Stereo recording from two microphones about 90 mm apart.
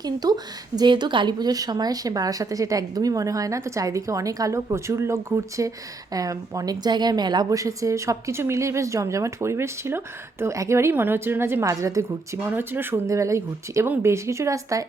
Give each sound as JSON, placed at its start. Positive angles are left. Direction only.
{"t": 0.0, "sound": "speech", "side_deg": -45}
{"t": 0.8, "sound": "a woman's voice", "side_deg": -60}
{"t": 7.6, "sound": "a woman's voice", "side_deg": -35}
{"t": 12.5, "sound": "speech", "side_deg": -25}
{"t": 13.1, "sound": "a woman's voice", "side_deg": -35}